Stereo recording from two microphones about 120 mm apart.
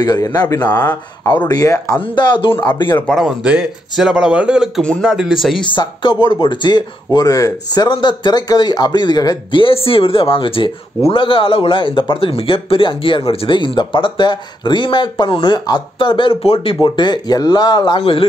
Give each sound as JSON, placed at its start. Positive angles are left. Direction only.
{"t": 0.0, "sound": "speech", "side_deg": 35}
{"t": 0.7, "sound": "speech", "side_deg": 15}
{"t": 1.5, "sound": "speech", "side_deg": 30}
{"t": 3.1, "sound": "a man's voice", "side_deg": -5}
{"t": 5.7, "sound": "speech", "side_deg": 40}